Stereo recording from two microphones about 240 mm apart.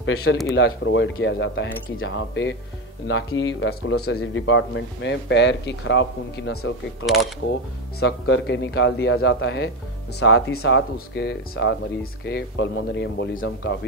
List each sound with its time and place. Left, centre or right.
0.0 s speech: left
8.0 s speech: left